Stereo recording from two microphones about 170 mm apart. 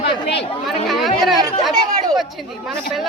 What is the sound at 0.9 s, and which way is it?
Speech, centre (ahead or behind).